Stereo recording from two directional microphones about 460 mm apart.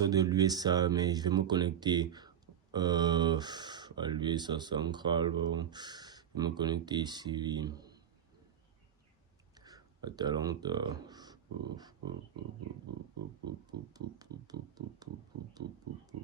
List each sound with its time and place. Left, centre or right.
0.0 s speech: centre
9.6 s a sound: centre
13.5 s speech: centre
15.6 s speech: right